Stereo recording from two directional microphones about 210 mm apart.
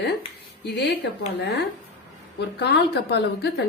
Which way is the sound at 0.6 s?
50° left (ahead or behind).